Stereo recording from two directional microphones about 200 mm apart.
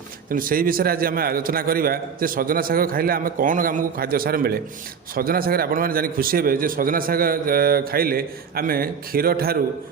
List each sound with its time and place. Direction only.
0.3 s a man's voice: 45° right (ahead or behind)